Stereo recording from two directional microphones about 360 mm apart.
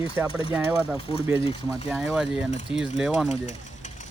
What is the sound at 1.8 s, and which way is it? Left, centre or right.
Speech, centre.